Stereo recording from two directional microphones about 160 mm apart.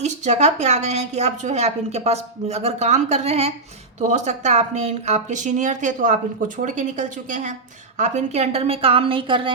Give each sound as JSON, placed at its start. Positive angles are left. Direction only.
{"t": 0.0, "sound": "a woman's voice", "side_deg": -45}